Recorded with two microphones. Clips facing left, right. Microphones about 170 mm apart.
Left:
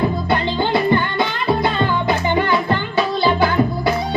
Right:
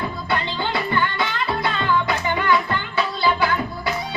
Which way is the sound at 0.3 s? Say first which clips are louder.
Left 6 dB; 35° left (ahead or behind).